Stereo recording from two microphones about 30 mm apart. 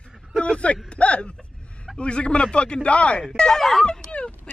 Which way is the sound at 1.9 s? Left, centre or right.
Left.